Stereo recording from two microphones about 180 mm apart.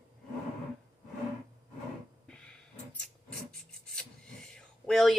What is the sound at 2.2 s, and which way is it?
Filing, 5° left (ahead or behind).